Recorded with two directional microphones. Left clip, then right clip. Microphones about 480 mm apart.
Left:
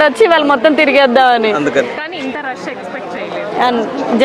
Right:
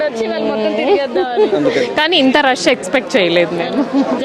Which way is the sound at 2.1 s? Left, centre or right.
Right.